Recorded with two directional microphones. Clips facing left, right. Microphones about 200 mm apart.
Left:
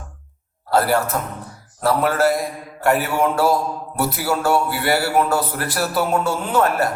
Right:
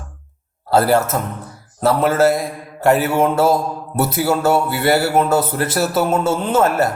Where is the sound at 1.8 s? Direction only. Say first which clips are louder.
Right 3 dB; 25° right (ahead or behind).